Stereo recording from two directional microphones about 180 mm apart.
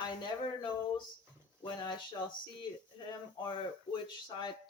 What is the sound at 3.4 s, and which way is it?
Speech, 25° left (ahead or behind).